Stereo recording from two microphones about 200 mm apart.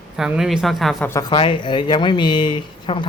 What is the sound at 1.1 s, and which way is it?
Speech, 20° left (ahead or behind).